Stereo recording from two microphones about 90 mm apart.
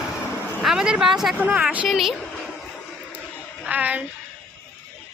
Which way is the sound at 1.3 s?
15° right (ahead or behind).